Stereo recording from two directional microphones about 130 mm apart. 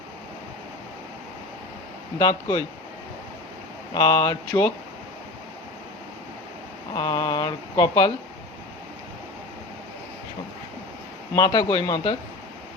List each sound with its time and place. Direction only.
2.1 s speech: 35° left (ahead or behind)
3.9 s speech: 30° left (ahead or behind)
6.9 s speech: 35° left (ahead or behind)
11.3 s speech: 35° left (ahead or behind)